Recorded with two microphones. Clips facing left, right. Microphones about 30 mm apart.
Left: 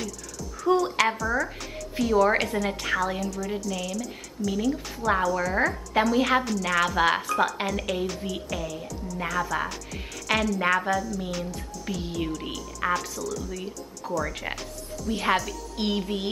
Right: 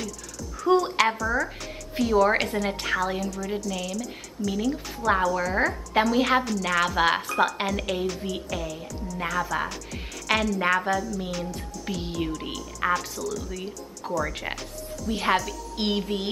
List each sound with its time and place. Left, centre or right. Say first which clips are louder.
0.0 s music: even; centre
0.9 s a woman's voice: right 1 dB; centre
15.7 s music: right 1 dB; centre
16.0 s a woman's voice: right 1 dB; centre